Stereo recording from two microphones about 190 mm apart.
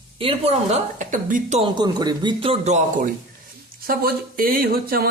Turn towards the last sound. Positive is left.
turn(degrees=-50)  # may be behind; listen again after turning